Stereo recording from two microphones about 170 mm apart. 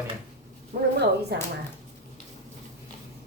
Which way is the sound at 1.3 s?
75° right (ahead or behind).